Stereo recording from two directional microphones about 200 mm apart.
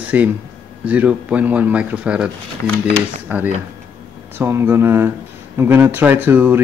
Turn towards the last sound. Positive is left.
turn(degrees=-10)  # may be behind; listen again after turning